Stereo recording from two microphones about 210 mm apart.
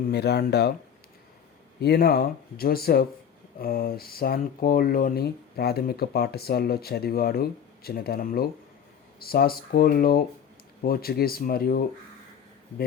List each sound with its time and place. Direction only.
0.1 s speech: 50° left (ahead or behind)
1.8 s speech: 50° left (ahead or behind)